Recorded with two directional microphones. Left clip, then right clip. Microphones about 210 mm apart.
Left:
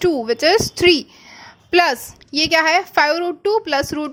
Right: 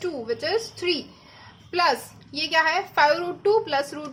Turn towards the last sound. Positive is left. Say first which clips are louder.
# left 5 dB
turn(degrees=40)  # may be behind; listen again after turning